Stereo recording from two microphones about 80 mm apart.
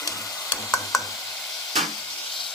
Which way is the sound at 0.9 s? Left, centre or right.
Centre.